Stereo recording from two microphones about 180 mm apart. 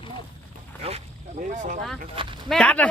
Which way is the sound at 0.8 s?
35° right (ahead or behind).